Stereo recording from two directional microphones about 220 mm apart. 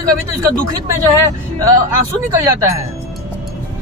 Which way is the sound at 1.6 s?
15° right (ahead or behind).